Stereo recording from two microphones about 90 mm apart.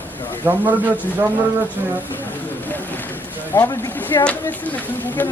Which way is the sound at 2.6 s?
20° left (ahead or behind).